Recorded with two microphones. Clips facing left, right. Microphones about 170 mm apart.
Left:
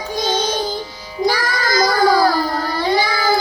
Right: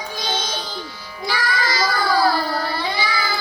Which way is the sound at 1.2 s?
45° left (ahead or behind).